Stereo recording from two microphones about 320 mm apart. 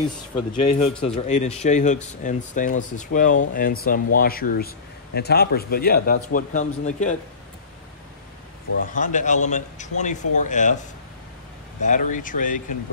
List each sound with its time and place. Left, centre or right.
0.5 s speech: centre
8.9 s speech: left